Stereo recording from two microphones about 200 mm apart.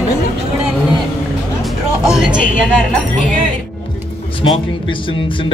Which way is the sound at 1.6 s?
5° right (ahead or behind).